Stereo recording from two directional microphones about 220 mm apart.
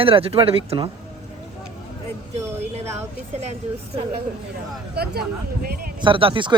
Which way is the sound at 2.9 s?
30° right (ahead or behind).